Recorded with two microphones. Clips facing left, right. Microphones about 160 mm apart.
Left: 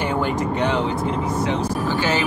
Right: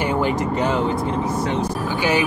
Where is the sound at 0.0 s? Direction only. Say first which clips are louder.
Right 1 dB; 5° right (ahead or behind).